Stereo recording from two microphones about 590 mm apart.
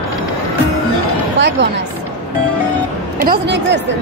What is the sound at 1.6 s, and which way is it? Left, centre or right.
Speech, centre.